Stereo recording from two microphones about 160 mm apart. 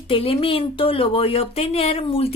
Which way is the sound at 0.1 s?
35° left (ahead or behind).